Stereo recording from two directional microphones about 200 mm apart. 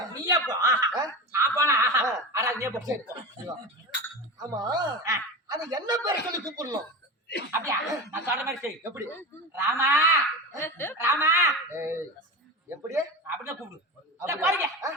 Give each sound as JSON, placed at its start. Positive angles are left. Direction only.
{"t": 0.1, "sound": "speech", "side_deg": -20}
{"t": 4.4, "sound": "speech", "side_deg": -20}
{"t": 10.6, "sound": "speech", "side_deg": 10}
{"t": 11.0, "sound": "speech", "side_deg": -15}